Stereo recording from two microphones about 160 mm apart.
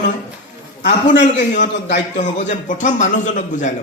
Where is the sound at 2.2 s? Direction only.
50° left (ahead or behind).